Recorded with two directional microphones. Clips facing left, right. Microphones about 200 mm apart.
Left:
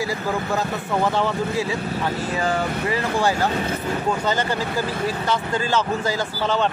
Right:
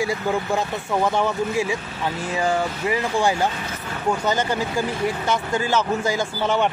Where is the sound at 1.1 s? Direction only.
15° right (ahead or behind).